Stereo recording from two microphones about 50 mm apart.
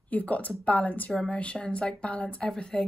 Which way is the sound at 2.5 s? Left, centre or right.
Centre.